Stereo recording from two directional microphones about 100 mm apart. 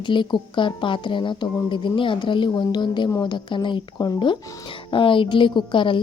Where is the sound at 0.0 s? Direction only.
50° left (ahead or behind).